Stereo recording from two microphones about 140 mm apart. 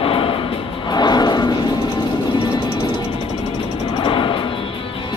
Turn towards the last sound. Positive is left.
turn(degrees=40)  # may be behind; listen again after turning